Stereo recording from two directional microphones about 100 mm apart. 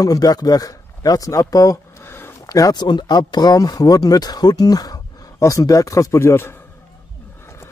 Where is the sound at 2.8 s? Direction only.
45° left (ahead or behind); by 6.5 s 25° left (ahead or behind).